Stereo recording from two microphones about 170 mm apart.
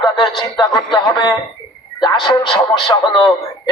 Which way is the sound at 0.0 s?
25° left (ahead or behind).